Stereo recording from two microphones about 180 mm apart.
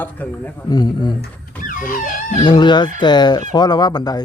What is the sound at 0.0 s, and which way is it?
Speech, 10° left (ahead or behind).